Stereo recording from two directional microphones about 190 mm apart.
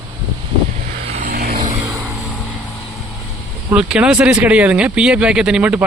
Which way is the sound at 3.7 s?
5° right (ahead or behind).